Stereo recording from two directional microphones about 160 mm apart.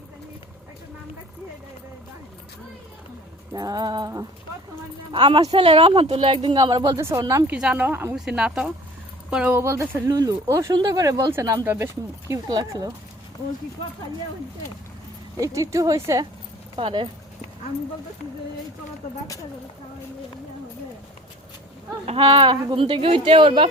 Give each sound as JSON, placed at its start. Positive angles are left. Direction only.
{"t": 3.5, "sound": "speech", "side_deg": -25}
{"t": 7.5, "sound": "speech", "side_deg": -5}
{"t": 15.4, "sound": "speech", "side_deg": -20}
{"t": 16.7, "sound": "speech", "side_deg": -30}
{"t": 22.2, "sound": "speech", "side_deg": -25}